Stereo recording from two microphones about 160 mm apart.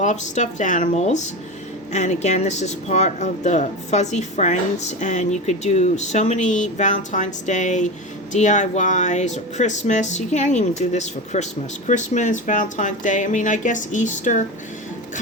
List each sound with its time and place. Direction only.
0.0 s speech: 50° left (ahead or behind)